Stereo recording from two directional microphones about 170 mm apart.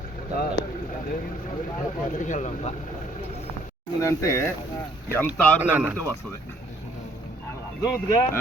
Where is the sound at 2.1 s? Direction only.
45° left (ahead or behind).